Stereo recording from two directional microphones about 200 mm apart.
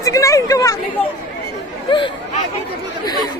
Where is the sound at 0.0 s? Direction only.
15° left (ahead or behind).